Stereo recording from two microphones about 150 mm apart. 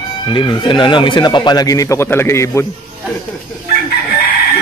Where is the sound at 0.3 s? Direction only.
30° left (ahead or behind).